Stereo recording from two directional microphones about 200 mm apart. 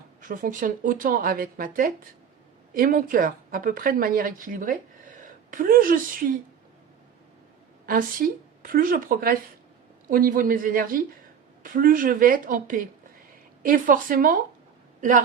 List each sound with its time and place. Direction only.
0.2 s speech: 40° right (ahead or behind)
7.9 s speech: 45° right (ahead or behind)